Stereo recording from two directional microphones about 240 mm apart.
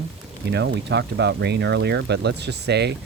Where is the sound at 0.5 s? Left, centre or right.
Right.